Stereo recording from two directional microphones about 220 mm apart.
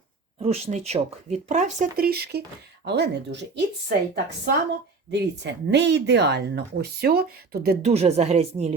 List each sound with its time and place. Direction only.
0.3 s speech: 30° right (ahead or behind); by 7.9 s 45° right (ahead or behind)
7.9 s speech: 30° right (ahead or behind)